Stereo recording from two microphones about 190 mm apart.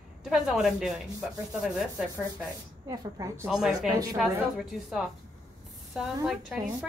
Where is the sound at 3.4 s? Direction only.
Centre (ahead or behind).